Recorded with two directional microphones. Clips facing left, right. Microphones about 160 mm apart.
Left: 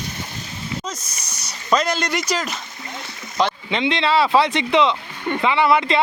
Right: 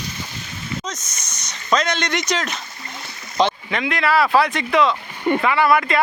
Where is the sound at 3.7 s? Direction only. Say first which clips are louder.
Left 1 dB; 25° left (ahead or behind).